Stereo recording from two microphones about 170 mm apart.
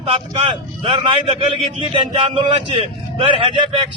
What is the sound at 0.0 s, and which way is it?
A man's voice, 35° right (ahead or behind).